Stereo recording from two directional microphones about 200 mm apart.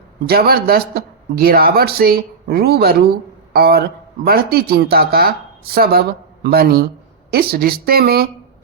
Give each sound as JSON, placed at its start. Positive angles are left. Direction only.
{"t": 0.3, "sound": "speech", "side_deg": -50}